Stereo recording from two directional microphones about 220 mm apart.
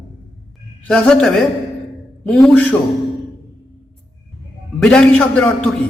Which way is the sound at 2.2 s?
5° left (ahead or behind).